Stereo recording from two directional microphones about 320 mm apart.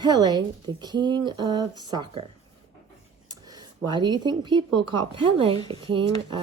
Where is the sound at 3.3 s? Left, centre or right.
Centre.